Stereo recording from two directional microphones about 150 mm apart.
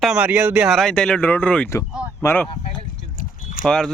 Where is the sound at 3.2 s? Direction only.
65° left (ahead or behind).